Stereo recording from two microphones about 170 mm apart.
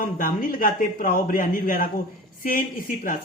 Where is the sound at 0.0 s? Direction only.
55° left (ahead or behind).